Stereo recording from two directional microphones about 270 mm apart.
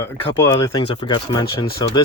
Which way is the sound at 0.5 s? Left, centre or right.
Centre.